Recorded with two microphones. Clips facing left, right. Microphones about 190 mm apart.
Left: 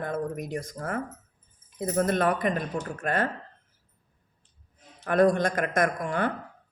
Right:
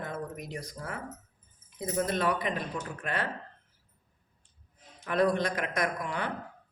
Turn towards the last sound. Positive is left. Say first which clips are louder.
# left 6 dB
turn(degrees=50)  # may be behind; listen again after turning